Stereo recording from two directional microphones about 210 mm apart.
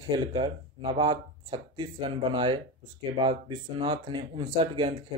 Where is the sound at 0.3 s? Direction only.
25° right (ahead or behind).